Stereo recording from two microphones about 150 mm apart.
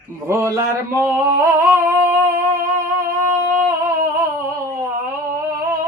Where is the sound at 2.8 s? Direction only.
20° right (ahead or behind).